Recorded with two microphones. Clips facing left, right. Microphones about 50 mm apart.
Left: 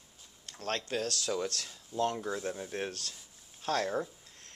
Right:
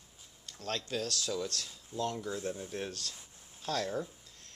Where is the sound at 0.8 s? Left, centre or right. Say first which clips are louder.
Even; left.